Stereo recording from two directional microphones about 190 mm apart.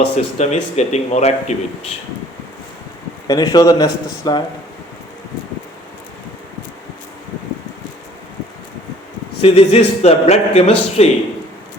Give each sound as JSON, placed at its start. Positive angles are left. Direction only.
{"t": 0.0, "sound": "a man's voice", "side_deg": 35}
{"t": 3.2, "sound": "a man's voice", "side_deg": 20}
{"t": 9.4, "sound": "a man's voice", "side_deg": 30}